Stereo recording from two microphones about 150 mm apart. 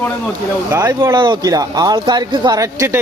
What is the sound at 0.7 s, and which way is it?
Speech, 20° right (ahead or behind).